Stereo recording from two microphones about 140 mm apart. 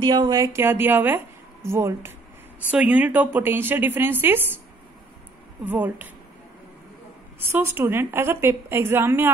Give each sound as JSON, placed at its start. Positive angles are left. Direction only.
{"t": 0.0, "sound": "a woman's voice", "side_deg": -35}
{"t": 5.7, "sound": "a woman's voice", "side_deg": -15}
{"t": 7.3, "sound": "a woman's voice", "side_deg": -15}